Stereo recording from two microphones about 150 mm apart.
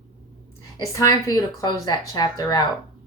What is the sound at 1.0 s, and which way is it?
A woman's voice, 25° left (ahead or behind).